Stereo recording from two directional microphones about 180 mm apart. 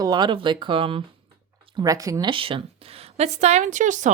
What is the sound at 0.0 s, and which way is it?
A woman's voice, 25° right (ahead or behind).